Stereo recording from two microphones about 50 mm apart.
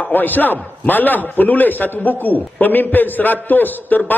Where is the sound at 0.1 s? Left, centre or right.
Left.